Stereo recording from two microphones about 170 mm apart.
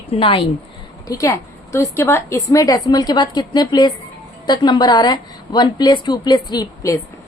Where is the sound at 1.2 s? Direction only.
20° left (ahead or behind).